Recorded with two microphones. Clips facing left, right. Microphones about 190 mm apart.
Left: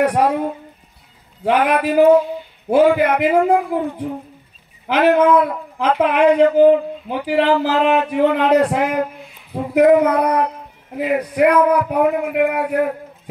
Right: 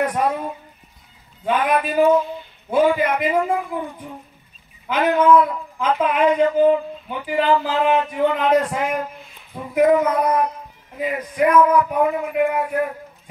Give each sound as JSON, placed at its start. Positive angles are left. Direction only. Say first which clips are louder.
{"t": 0.0, "sound": "a woman's voice", "louder": "left 5 dB", "side_deg": 70}
{"t": 4.8, "sound": "a man's voice", "louder": "left 3 dB", "side_deg": 75}